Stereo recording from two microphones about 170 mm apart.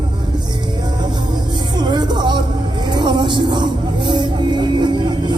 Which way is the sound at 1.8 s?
25° right (ahead or behind).